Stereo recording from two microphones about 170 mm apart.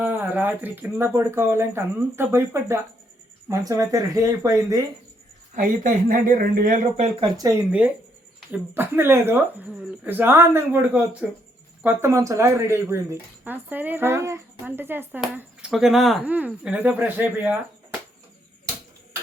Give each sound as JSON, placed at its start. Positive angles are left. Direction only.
{"t": 0.0, "sound": "speech", "side_deg": -10}
{"t": 5.5, "sound": "speech", "side_deg": -50}
{"t": 7.7, "sound": "speech", "side_deg": -10}